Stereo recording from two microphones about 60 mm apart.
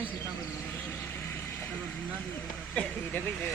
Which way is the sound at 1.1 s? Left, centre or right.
Left.